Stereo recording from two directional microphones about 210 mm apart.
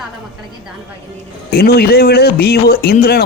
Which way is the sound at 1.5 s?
45° left (ahead or behind).